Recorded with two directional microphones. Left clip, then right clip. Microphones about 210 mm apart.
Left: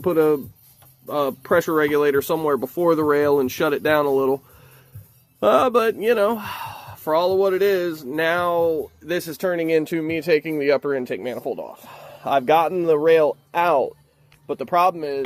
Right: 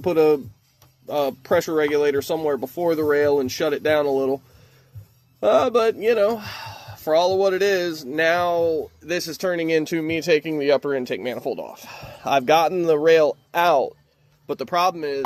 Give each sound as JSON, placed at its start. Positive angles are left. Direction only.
{"t": 0.0, "sound": "speech", "side_deg": 10}
{"t": 5.4, "sound": "speech", "side_deg": 35}
{"t": 14.4, "sound": "speech", "side_deg": -15}
{"t": 14.7, "sound": "speech", "side_deg": 0}